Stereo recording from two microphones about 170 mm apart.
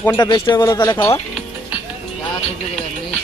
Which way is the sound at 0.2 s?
25° left (ahead or behind).